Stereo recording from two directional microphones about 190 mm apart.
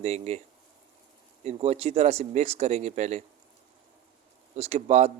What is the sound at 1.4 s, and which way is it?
A man's voice, 30° right (ahead or behind).